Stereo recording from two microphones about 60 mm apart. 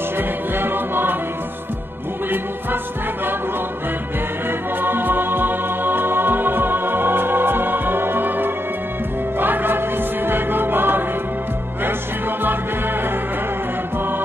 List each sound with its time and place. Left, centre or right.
0.6 s music: right
4.8 s music: right